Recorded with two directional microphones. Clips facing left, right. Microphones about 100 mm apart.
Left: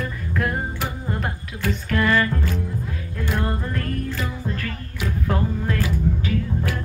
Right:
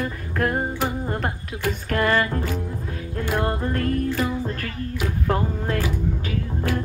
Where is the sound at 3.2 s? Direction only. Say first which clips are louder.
Right 2 dB; 20° right (ahead or behind).